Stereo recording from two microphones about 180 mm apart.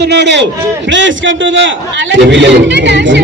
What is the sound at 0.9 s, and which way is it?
A man's voice, 90° right.